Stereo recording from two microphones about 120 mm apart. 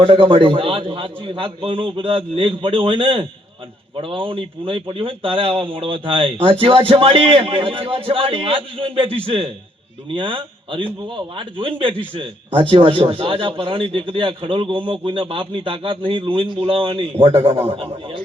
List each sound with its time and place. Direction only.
0.0 s a man's voice: 50° right (ahead or behind)